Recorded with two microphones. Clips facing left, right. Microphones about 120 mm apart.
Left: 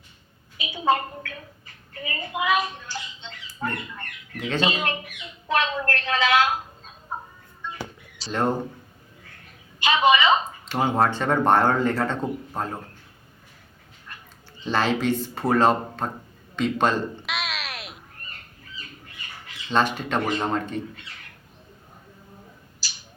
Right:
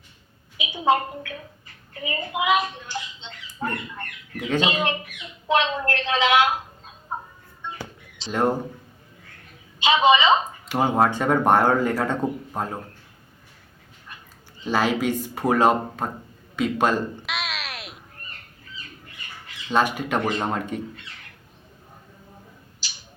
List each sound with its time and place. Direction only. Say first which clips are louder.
0.5 s a sound: right 2 dB; 15° right (ahead or behind)
2.0 s a woman's voice: right 2 dB; 15° right (ahead or behind)
7.1 s a sound: right 2 dB; 15° right (ahead or behind)
8.3 s speech: right 2 dB; 10° right (ahead or behind)
9.8 s speech: right 2 dB; 20° right (ahead or behind)
14.6 s speech: right 1 dB; 10° right (ahead or behind)
16.6 s cat: right 1 dB; 10° right (ahead or behind)
19.7 s speech: right 1 dB; 10° right (ahead or behind)
22.8 s a sound: left 1 dB; 20° right (ahead or behind)